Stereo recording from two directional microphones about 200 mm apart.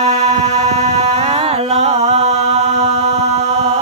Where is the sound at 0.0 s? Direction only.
30° right (ahead or behind).